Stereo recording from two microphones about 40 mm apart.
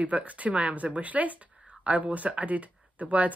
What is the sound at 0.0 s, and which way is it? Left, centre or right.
Speech, right.